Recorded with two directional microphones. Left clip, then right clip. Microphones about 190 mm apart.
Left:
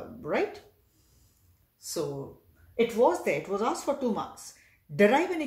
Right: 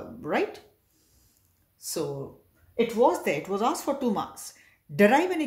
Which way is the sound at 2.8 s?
40° right (ahead or behind).